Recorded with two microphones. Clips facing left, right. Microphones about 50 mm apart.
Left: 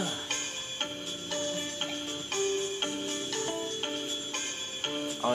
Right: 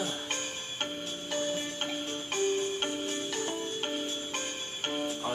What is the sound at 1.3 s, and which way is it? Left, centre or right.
Music, centre.